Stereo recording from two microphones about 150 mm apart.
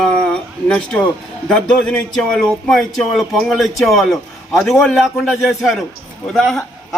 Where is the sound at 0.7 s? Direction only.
5° left (ahead or behind).